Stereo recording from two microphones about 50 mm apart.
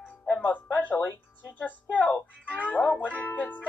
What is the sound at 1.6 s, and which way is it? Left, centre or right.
Speech, left.